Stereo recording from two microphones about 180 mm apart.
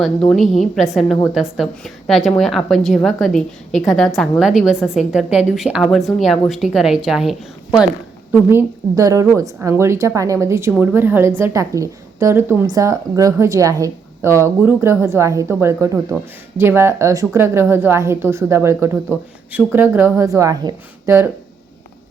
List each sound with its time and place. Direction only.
0.0 s a woman's voice: 5° left (ahead or behind)
8.4 s a woman's voice: 15° right (ahead or behind)